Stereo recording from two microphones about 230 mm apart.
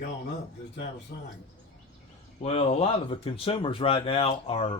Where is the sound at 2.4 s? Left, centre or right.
Left.